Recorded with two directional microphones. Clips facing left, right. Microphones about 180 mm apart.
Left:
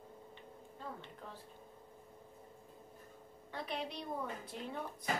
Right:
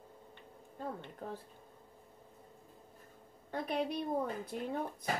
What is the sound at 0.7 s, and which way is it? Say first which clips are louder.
Speech: right 6 dB; 45° right (ahead or behind).